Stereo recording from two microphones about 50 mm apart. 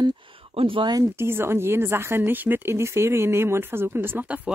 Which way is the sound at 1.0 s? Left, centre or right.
Right.